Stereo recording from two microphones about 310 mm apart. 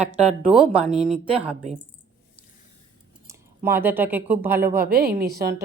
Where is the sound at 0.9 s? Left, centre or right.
Centre.